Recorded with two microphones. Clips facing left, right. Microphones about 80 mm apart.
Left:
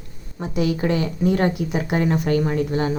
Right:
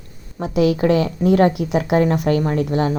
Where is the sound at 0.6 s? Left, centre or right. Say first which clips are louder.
Right 5 dB; right.